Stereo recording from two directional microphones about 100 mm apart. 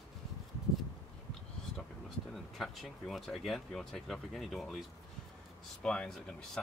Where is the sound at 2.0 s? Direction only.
Centre (ahead or behind).